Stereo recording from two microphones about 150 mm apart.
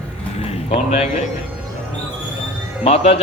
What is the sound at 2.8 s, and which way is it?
Speech, 45° left (ahead or behind).